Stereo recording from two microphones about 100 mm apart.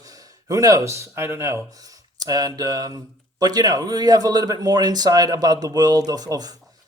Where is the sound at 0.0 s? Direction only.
35° right (ahead or behind).